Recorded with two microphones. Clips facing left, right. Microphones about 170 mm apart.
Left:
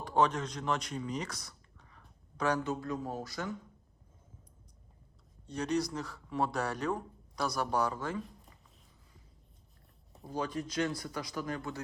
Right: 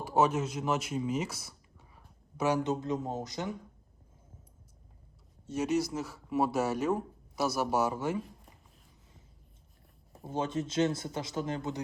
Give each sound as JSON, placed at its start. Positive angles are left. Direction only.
{"t": 0.0, "sound": "speech", "side_deg": -5}
{"t": 2.6, "sound": "speech", "side_deg": -20}
{"t": 5.5, "sound": "speech", "side_deg": -5}
{"t": 10.2, "sound": "speech", "side_deg": -25}